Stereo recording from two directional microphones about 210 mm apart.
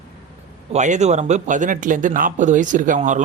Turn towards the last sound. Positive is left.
turn(degrees=-35)  # may be behind; listen again after turning